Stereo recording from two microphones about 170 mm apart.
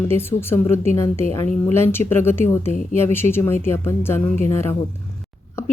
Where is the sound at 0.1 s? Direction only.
15° left (ahead or behind).